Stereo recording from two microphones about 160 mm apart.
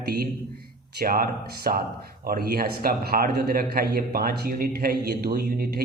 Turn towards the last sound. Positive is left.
turn(degrees=-70)  # may be behind; listen again after turning